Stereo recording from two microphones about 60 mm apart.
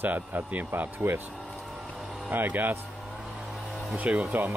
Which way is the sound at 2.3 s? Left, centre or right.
Right.